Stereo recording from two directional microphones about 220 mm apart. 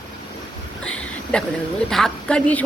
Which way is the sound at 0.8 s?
5° left (ahead or behind).